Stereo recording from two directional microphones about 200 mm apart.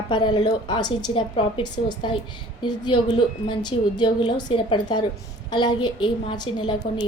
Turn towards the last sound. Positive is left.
turn(degrees=25)  # may be behind; listen again after turning